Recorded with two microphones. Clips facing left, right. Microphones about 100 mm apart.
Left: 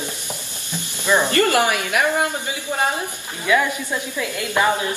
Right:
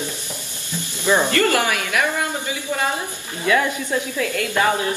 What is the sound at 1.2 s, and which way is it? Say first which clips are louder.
A woman's voice: left 1 dB; 20° left (ahead or behind).